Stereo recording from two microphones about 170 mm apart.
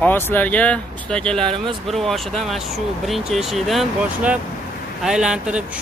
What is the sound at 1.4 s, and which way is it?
Speech, 30° right (ahead or behind).